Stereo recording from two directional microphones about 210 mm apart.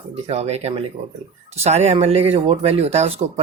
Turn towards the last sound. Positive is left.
turn(degrees=-30)  # may be behind; listen again after turning